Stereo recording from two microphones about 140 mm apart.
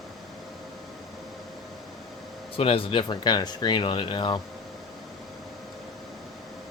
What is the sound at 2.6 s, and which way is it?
Speech, 40° left (ahead or behind).